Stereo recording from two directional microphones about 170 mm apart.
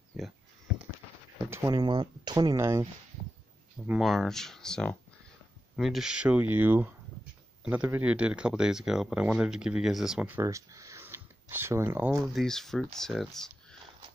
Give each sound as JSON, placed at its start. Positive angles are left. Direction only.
{"t": 1.5, "sound": "speech", "side_deg": -20}
{"t": 3.8, "sound": "speech", "side_deg": -5}
{"t": 12.3, "sound": "speech", "side_deg": 0}